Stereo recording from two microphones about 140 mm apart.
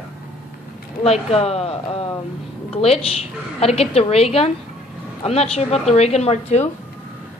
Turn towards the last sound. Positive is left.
turn(degrees=50)  # may be behind; listen again after turning